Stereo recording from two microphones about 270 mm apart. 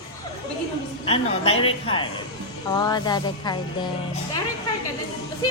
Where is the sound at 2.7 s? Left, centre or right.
Centre.